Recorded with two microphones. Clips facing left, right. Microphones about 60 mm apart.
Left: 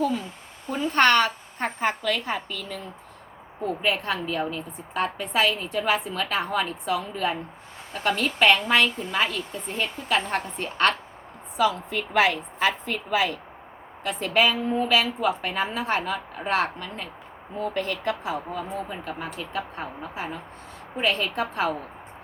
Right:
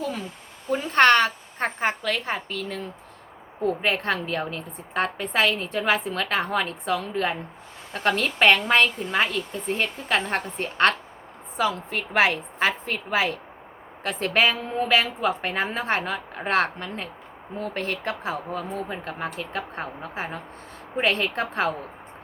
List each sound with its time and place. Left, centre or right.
0.9 s a woman's voice: right
14.0 s a woman's voice: right
18.5 s a woman's voice: right